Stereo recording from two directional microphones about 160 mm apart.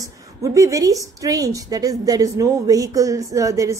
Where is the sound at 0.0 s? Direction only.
20° right (ahead or behind).